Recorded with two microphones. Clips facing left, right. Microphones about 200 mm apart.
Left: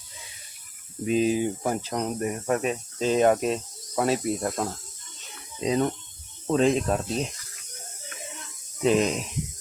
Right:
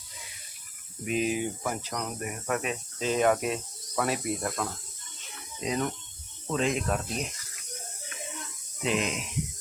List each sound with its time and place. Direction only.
1.0 s speech: 30° left (ahead or behind)
8.8 s speech: 40° left (ahead or behind)